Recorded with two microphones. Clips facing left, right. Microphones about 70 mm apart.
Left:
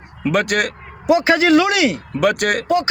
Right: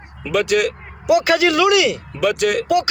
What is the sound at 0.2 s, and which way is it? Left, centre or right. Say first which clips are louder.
Speech: even; left.